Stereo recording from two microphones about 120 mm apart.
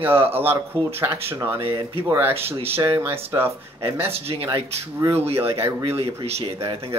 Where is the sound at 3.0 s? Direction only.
20° right (ahead or behind).